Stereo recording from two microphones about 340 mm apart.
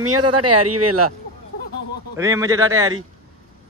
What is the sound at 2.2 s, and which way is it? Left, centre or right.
Speech, centre.